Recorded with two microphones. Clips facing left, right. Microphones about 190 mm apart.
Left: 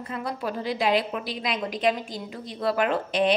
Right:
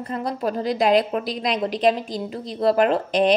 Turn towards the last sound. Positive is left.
turn(degrees=-40)  # may be behind; listen again after turning